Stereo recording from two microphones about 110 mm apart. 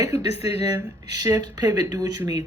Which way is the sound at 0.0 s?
35° right (ahead or behind).